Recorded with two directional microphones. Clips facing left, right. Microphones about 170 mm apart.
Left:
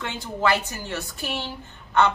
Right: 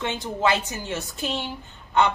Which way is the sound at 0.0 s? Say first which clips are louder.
Right 1 dB; 20° right (ahead or behind).